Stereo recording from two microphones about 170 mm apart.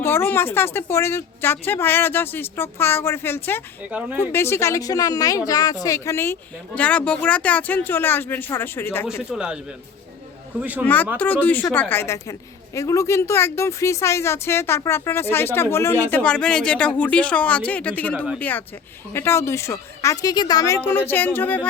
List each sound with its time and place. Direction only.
0.0 s a woman's voice: 15° left (ahead or behind)
3.8 s speech: 10° right (ahead or behind)
4.3 s a woman's voice: 15° left (ahead or behind)
9.3 s a man's voice: 5° right (ahead or behind)
10.6 s speech: 10° right (ahead or behind)
10.8 s a woman's voice: 10° left (ahead or behind)